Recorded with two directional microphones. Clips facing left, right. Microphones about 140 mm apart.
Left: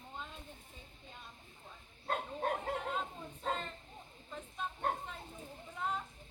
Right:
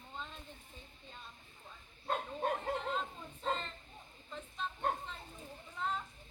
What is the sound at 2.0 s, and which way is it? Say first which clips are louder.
Bow-wow: right 1 dB; centre (ahead or behind).